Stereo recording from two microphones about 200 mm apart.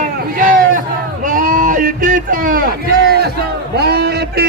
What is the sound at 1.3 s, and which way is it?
Bleat, 40° right (ahead or behind).